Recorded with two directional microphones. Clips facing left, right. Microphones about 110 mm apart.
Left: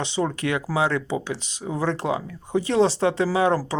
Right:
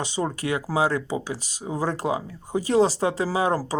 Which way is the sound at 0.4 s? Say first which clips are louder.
Right 2 dB; 35° right (ahead or behind).